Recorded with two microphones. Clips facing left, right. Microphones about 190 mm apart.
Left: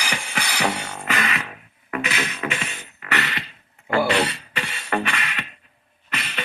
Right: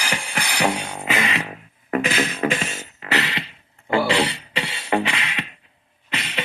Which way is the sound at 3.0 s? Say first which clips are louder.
Right 3 dB; 25° right (ahead or behind).